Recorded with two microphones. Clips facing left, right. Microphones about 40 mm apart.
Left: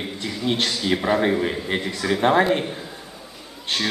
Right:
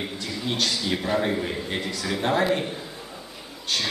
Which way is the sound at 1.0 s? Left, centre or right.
Centre.